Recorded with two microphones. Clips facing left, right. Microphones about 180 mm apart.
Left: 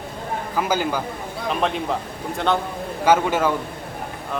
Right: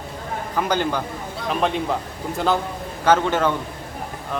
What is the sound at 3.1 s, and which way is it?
Speech, 10° left (ahead or behind).